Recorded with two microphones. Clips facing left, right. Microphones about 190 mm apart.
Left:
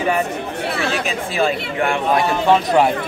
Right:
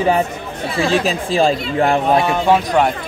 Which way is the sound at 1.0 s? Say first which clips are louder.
Right 4 dB; 30° right (ahead or behind).